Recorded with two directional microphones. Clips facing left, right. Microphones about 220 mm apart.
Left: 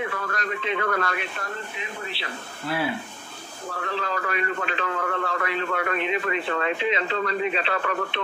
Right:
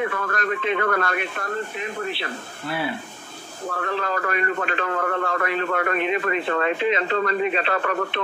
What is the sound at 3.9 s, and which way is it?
Speech, 50° right (ahead or behind).